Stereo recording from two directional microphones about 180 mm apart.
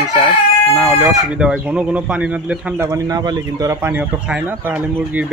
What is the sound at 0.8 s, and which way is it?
Speech, 5° right (ahead or behind).